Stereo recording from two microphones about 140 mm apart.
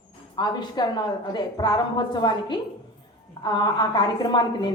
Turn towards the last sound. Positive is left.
turn(degrees=30)  # may be behind; listen again after turning